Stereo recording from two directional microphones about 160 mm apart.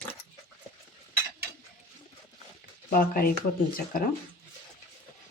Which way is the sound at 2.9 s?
65° left (ahead or behind).